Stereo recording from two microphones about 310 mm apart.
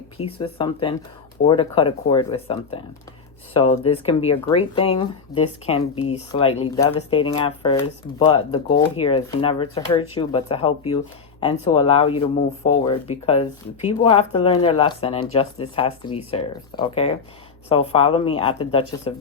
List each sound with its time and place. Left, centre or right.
0.2 s speech: centre